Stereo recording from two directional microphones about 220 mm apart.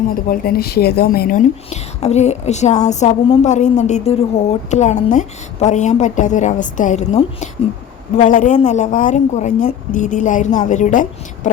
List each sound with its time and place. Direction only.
0.1 s a woman's voice: 40° left (ahead or behind)